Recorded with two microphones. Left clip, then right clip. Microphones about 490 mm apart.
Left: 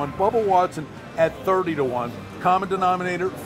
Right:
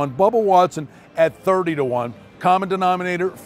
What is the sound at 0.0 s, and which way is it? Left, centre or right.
A man's voice, right.